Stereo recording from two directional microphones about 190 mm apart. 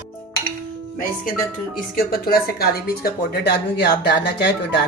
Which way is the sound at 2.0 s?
55° left (ahead or behind).